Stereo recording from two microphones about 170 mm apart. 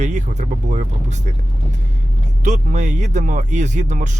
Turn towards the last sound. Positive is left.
turn(degrees=-45)  # may be behind; listen again after turning